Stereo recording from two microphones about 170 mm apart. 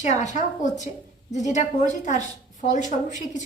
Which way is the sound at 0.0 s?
45° left (ahead or behind).